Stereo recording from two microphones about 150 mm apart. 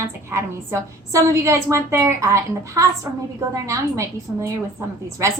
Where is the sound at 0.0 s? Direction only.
20° right (ahead or behind).